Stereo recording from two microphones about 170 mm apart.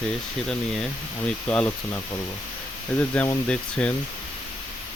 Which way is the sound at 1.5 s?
5° left (ahead or behind).